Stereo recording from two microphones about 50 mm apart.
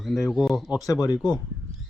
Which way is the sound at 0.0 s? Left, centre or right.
Centre.